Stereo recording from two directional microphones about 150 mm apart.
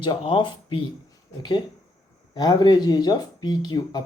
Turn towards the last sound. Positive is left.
turn(degrees=30)  # may be behind; listen again after turning